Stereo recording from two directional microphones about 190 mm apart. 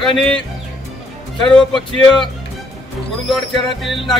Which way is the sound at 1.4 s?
5° left (ahead or behind).